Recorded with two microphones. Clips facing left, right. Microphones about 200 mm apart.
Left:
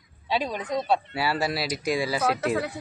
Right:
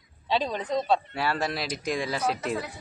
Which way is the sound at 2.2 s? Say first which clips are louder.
Left 4 dB; 70° left (ahead or behind).